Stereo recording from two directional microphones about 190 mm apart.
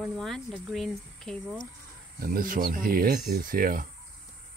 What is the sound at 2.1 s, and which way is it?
Speech, 50° right (ahead or behind).